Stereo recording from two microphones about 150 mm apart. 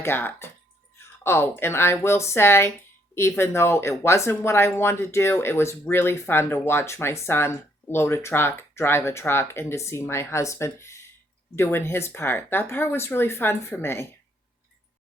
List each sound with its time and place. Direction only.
0.0 s speech: 15° left (ahead or behind)